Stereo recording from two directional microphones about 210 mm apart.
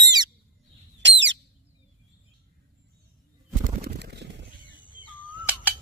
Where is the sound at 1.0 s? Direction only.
60° right (ahead or behind).